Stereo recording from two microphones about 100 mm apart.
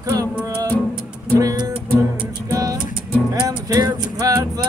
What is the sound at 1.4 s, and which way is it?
Music, 35° right (ahead or behind).